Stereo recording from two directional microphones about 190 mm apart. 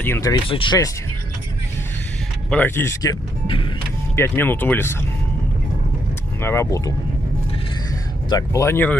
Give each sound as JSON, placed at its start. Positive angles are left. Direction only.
{"t": 0.0, "sound": "speech", "side_deg": 15}
{"t": 0.5, "sound": "speech", "side_deg": 25}
{"t": 2.5, "sound": "speech", "side_deg": 10}
{"t": 4.1, "sound": "speech", "side_deg": 10}
{"t": 6.4, "sound": "speech", "side_deg": 15}
{"t": 8.3, "sound": "speech", "side_deg": 15}